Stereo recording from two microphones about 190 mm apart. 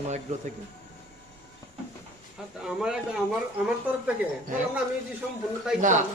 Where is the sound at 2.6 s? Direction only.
5° right (ahead or behind).